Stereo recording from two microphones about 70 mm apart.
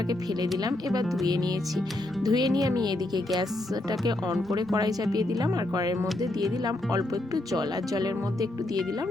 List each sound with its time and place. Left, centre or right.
0.6 s speech: right
4.0 s speech: right